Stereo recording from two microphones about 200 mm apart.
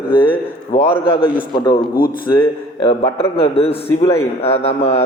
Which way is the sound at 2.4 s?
25° left (ahead or behind).